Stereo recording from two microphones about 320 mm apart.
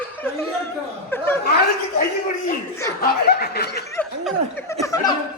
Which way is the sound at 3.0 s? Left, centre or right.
Left.